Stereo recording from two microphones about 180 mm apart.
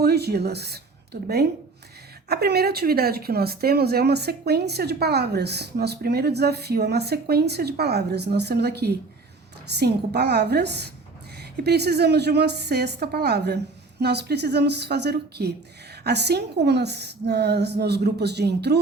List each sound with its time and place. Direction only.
0.0 s speech: 65° right (ahead or behind)